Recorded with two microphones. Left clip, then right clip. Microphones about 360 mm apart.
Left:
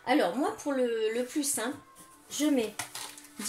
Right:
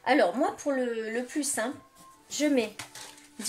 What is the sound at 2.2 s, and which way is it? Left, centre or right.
Speech, right.